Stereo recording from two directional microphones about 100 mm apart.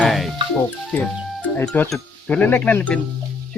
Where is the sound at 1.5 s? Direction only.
15° left (ahead or behind).